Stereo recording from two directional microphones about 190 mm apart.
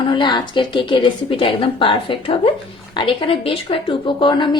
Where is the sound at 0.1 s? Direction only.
25° left (ahead or behind).